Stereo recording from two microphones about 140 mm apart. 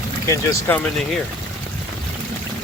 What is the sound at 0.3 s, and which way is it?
Speech, 15° left (ahead or behind).